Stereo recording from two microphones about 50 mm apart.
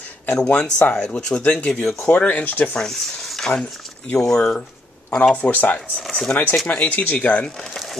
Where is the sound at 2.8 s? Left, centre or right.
Centre.